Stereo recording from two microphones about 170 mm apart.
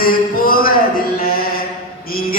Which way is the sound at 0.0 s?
60° left (ahead or behind).